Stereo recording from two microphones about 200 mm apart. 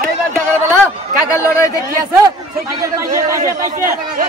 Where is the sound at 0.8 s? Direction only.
15° left (ahead or behind).